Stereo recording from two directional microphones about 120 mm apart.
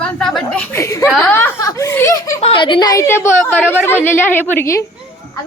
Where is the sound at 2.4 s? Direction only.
50° left (ahead or behind); by 4.8 s 20° left (ahead or behind).